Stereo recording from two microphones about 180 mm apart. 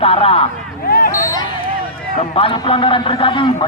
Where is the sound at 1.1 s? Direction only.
15° left (ahead or behind).